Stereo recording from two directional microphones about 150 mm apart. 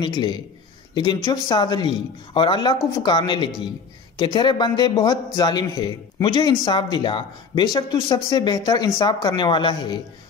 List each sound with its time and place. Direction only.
0.0 s speech: 30° left (ahead or behind)